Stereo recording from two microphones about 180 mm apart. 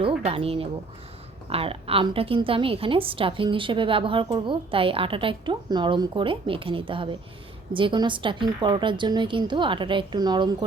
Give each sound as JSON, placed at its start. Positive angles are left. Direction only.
{"t": 0.0, "sound": "a woman's voice", "side_deg": -30}